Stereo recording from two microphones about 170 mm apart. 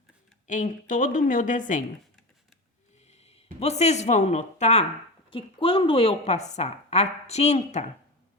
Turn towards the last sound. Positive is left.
turn(degrees=40)  # may be behind; listen again after turning